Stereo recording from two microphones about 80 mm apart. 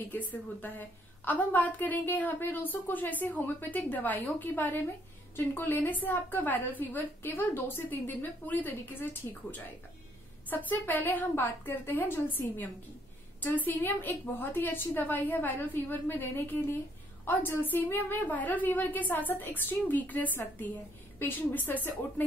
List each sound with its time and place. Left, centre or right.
0.1 s a woman's voice: left
10.5 s a woman's voice: left